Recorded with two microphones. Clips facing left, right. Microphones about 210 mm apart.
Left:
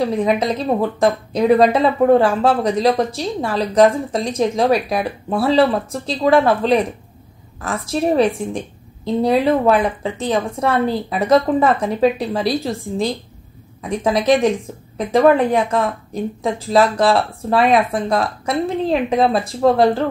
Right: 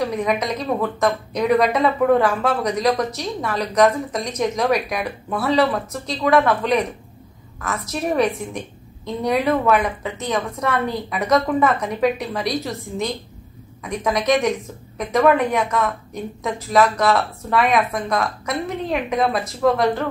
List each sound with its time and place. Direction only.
0.0 s a woman's voice: 30° left (ahead or behind)